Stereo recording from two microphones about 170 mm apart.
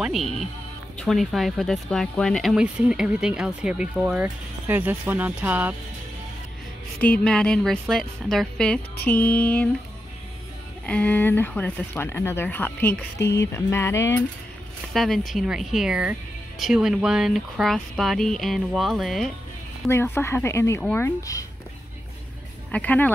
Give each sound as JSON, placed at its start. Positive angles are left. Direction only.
{"t": 0.0, "sound": "speech", "side_deg": 0}
{"t": 7.0, "sound": "speech", "side_deg": 5}
{"t": 10.9, "sound": "speech", "side_deg": 10}
{"t": 14.9, "sound": "speech", "side_deg": 0}
{"t": 19.9, "sound": "speech", "side_deg": 15}
{"t": 22.7, "sound": "speech", "side_deg": 10}